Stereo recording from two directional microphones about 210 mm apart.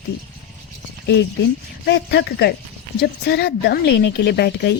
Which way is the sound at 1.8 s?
55° left (ahead or behind).